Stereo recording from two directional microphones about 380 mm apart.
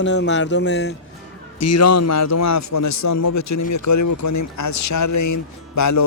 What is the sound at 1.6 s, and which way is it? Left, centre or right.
A man's voice, left.